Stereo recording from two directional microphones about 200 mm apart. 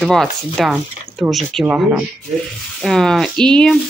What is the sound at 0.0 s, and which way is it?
Speech, centre (ahead or behind).